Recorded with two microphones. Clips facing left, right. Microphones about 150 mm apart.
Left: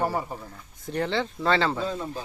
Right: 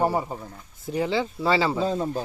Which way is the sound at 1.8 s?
35° right (ahead or behind).